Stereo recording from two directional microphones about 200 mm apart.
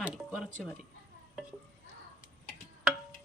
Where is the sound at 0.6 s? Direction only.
Centre (ahead or behind).